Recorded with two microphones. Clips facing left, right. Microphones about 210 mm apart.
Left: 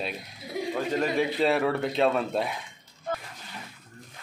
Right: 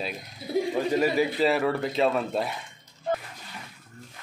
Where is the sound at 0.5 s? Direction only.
30° right (ahead or behind).